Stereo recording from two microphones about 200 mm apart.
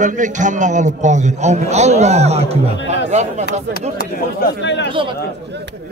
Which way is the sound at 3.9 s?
55° left (ahead or behind).